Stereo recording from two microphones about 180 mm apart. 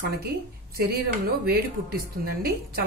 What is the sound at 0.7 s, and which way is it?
Speech, 60° right (ahead or behind).